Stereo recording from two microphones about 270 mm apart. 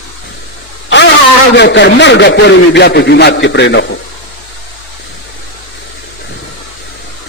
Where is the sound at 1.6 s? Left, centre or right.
Left.